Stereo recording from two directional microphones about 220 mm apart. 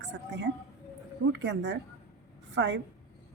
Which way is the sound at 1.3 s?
55° right (ahead or behind).